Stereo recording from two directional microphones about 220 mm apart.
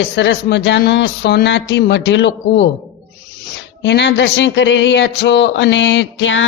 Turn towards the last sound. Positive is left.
turn(degrees=60)  # may be behind; listen again after turning